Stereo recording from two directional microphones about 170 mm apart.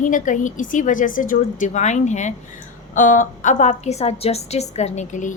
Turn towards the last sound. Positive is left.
turn(degrees=45)  # may be behind; listen again after turning